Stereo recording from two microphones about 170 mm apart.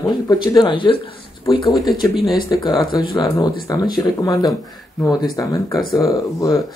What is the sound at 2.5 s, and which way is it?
Speech, 25° left (ahead or behind).